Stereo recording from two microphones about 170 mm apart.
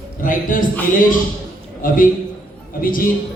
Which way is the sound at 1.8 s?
55° left (ahead or behind).